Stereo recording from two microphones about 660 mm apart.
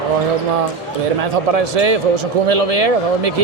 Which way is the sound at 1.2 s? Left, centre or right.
Right.